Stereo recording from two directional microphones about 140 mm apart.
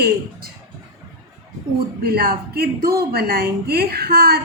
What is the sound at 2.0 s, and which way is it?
Speech, 90° right.